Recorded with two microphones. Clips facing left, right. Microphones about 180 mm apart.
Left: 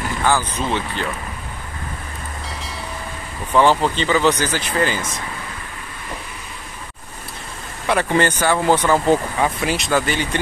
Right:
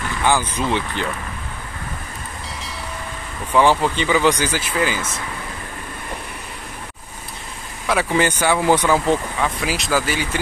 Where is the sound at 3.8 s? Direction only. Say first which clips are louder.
Even; 15° right (ahead or behind).